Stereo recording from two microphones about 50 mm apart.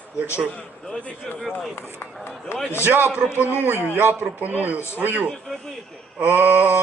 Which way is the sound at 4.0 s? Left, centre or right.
Right.